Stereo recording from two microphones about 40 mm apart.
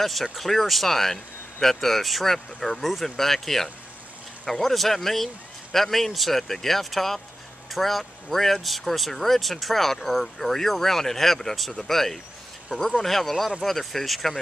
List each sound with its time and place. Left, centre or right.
0.0 s speech: centre